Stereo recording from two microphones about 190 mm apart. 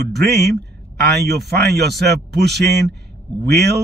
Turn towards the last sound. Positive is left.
turn(degrees=-60)  # may be behind; listen again after turning